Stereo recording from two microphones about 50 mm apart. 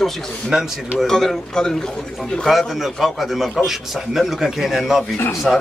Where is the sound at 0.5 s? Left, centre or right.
Right.